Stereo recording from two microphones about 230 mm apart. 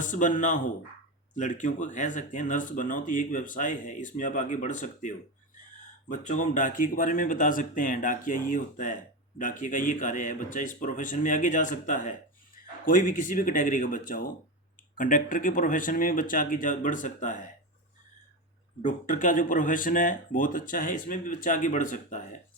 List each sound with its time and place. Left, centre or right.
0.0 s speech: left
18.8 s speech: left